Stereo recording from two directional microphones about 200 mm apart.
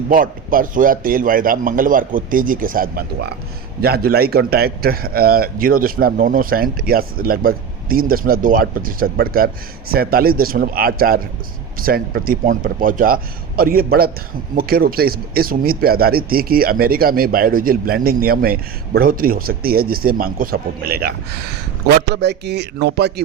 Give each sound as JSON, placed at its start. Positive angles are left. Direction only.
{"t": 0.1, "sound": "speech", "side_deg": -45}
{"t": 22.1, "sound": "speech", "side_deg": -55}